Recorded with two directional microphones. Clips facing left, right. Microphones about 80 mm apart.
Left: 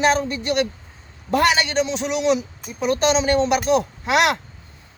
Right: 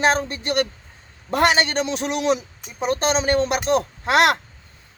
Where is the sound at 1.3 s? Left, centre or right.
Right.